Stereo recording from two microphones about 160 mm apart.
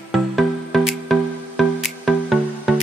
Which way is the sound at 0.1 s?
Centre (ahead or behind).